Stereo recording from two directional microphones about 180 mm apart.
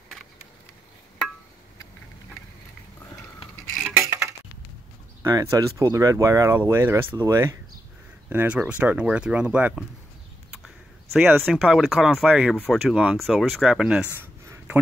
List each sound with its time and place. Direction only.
3.9 s a sound: 10° right (ahead or behind)
5.2 s speech: 15° right (ahead or behind)
11.1 s speech: centre (ahead or behind)